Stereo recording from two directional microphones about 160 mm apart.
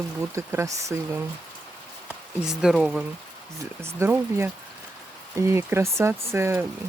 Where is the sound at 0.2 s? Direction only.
15° right (ahead or behind).